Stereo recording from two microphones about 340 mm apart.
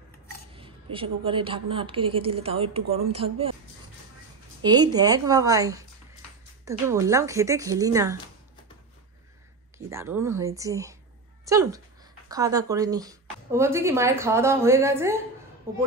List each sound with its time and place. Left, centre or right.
0.9 s speech: centre
4.6 s speech: centre
9.8 s speech: centre